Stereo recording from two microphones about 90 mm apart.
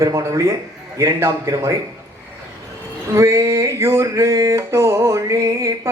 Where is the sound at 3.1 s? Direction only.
35° right (ahead or behind).